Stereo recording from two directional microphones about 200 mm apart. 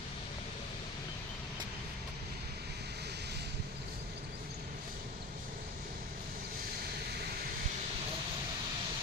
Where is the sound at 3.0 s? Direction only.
55° right (ahead or behind).